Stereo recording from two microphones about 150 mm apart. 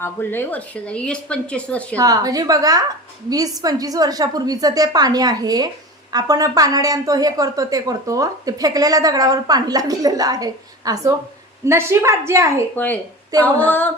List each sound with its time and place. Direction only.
0.0 s speech: 15° left (ahead or behind)
2.0 s a woman's voice: 25° right (ahead or behind)
12.7 s speech: 10° left (ahead or behind)